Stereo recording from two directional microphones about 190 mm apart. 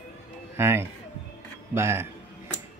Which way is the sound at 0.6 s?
10° right (ahead or behind).